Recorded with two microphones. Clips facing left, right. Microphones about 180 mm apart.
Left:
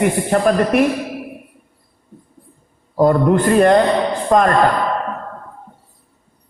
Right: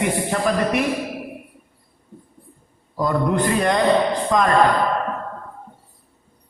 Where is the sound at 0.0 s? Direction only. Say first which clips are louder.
Left 6 dB; 45° left (ahead or behind).